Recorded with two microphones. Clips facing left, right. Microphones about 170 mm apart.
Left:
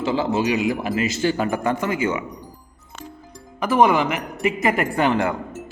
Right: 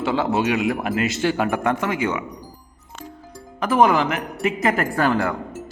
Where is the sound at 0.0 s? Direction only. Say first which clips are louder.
Even; centre (ahead or behind).